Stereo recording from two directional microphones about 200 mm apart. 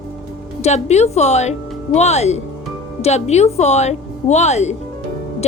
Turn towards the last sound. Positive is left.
turn(degrees=35)  # may be behind; listen again after turning